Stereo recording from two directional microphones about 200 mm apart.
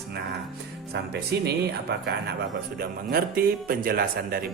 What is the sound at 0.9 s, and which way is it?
Speech, 55° right (ahead or behind).